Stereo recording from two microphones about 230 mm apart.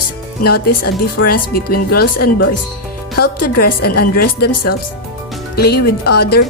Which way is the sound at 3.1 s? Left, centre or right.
Left.